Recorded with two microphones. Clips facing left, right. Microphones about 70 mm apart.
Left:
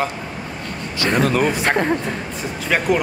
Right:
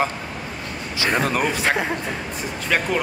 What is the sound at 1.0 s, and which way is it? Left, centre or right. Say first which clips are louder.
Speech: left 3 dB; centre.